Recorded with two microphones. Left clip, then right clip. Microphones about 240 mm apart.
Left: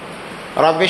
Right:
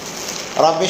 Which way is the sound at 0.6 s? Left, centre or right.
Left.